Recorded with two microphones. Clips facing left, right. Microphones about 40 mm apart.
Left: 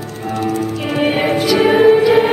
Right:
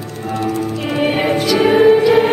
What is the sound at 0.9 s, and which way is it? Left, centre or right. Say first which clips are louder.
Music: even; centre.